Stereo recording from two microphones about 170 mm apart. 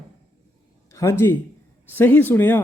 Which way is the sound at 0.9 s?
20° left (ahead or behind).